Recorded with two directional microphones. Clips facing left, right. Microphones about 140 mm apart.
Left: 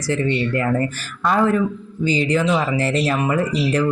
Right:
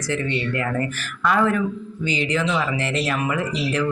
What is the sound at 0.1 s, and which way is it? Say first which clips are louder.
A man's voice: left 5 dB; 35° left (ahead or behind).